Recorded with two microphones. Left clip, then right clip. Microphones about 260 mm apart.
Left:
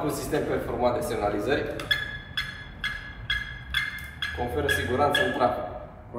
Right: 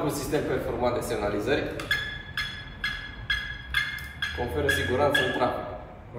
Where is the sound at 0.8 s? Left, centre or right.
Centre.